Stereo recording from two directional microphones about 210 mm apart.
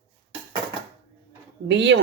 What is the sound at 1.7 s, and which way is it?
Speech, 55° right (ahead or behind).